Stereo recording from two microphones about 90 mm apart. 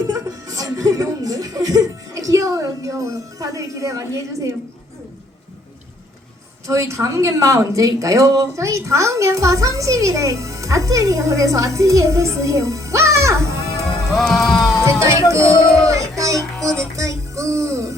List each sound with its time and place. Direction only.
0.1 s music: 45° right (ahead or behind)
6.7 s speech: 35° right (ahead or behind)
14.1 s music: centre (ahead or behind)
14.8 s music: 35° right (ahead or behind)
15.3 s speech: 35° right (ahead or behind)
15.7 s music: 35° right (ahead or behind)